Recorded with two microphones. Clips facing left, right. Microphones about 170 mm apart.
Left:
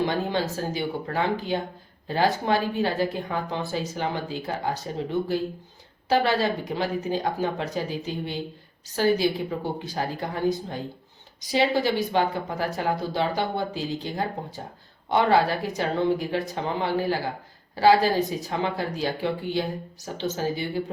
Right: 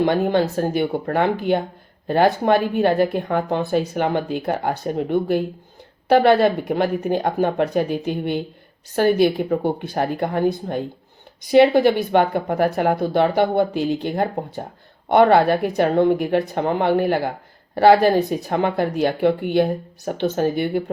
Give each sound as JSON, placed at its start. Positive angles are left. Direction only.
{"t": 0.0, "sound": "a woman's voice", "side_deg": -55}